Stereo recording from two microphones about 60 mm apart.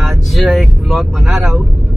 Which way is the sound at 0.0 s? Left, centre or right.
Centre.